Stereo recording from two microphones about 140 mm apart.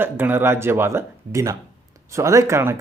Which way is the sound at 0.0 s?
15° right (ahead or behind).